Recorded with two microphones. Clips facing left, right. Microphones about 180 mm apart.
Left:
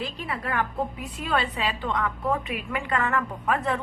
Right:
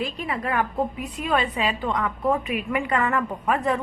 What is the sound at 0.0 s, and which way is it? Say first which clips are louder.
A woman's voice: right 4 dB; 15° right (ahead or behind).